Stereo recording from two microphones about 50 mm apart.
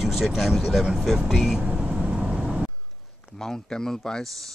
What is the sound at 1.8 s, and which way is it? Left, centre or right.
Vehicle, centre.